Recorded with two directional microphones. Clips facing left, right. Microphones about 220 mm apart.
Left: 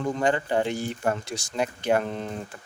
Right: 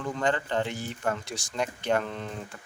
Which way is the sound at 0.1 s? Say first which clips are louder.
Left 3 dB; 15° left (ahead or behind).